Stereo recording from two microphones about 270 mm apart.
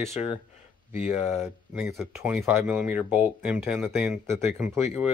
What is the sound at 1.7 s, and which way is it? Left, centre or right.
Speech, centre.